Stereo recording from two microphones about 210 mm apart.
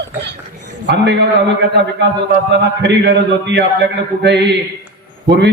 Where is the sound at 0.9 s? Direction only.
55° right (ahead or behind).